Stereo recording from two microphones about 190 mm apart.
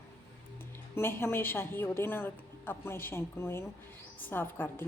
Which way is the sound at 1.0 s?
10° left (ahead or behind).